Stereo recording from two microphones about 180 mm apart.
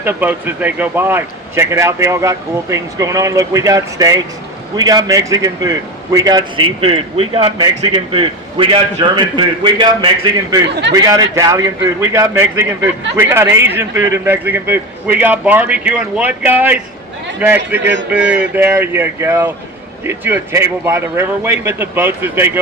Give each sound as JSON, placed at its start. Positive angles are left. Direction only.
{"t": 0.0, "sound": "a man's voice", "side_deg": -10}